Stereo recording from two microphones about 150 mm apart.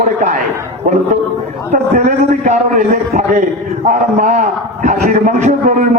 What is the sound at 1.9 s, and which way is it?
A man's voice, 55° right (ahead or behind).